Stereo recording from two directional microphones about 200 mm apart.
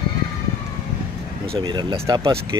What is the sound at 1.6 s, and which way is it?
Speech, 20° right (ahead or behind).